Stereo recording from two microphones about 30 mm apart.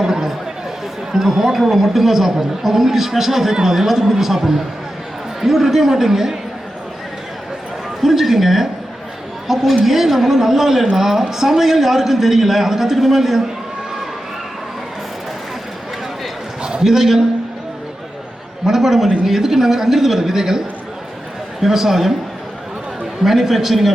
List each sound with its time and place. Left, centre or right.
0.0 s chatter: centre
1.1 s a man's voice: centre
5.4 s a man's voice: centre
8.0 s a man's voice: centre
16.8 s a man's voice: centre
18.6 s a man's voice: centre
21.6 s a man's voice: centre
23.2 s a man's voice: centre